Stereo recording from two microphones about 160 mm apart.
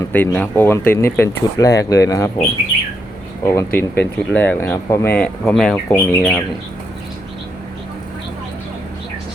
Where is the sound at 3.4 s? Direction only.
15° left (ahead or behind).